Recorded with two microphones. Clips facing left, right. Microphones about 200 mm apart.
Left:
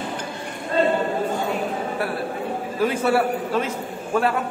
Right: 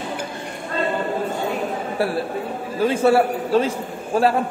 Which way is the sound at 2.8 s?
25° right (ahead or behind).